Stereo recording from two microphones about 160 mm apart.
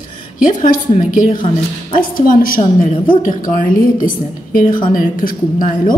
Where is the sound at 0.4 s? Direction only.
55° left (ahead or behind).